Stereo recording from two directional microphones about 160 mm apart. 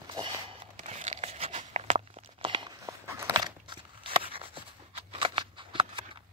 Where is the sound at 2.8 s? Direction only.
20° right (ahead or behind).